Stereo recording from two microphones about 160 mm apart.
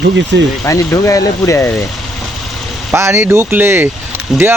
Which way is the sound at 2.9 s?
15° right (ahead or behind).